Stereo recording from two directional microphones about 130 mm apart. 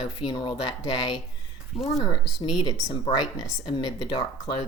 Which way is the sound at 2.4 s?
35° left (ahead or behind).